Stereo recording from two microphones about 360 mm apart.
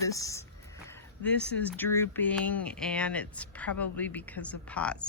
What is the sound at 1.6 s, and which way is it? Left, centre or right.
Speech, centre.